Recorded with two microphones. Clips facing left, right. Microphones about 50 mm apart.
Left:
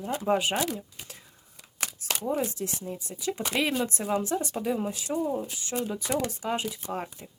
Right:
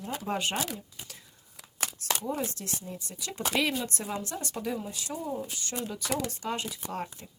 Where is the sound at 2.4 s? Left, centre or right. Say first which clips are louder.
Left 4 dB; centre.